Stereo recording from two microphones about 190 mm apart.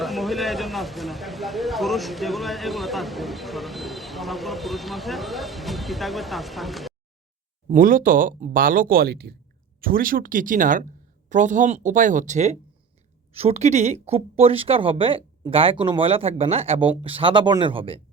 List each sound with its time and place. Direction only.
0.0 s speech: centre (ahead or behind)
7.7 s speech: 45° right (ahead or behind); by 18.0 s 30° right (ahead or behind)